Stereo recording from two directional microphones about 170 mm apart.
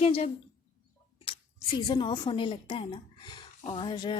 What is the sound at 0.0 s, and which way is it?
Speech, 35° left (ahead or behind).